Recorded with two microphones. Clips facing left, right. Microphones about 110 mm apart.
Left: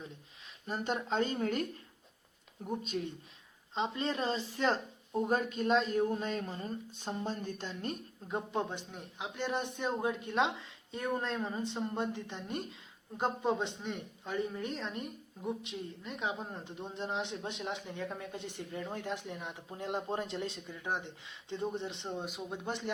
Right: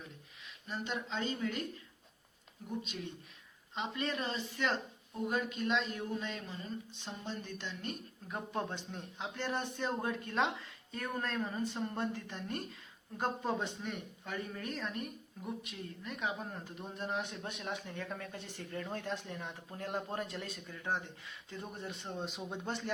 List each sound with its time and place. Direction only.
0.7 s speech: 45° left (ahead or behind)
2.6 s speech: 45° left (ahead or behind)
3.8 s speech: 30° left (ahead or behind)
8.3 s speech: 15° left (ahead or behind)
22.4 s a man's voice: 5° left (ahead or behind)
22.6 s speech: 15° left (ahead or behind)